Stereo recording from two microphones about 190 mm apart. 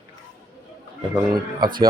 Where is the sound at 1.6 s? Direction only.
25° right (ahead or behind).